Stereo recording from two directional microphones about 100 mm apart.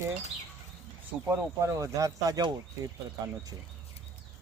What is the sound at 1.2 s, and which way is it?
Speech, 25° right (ahead or behind).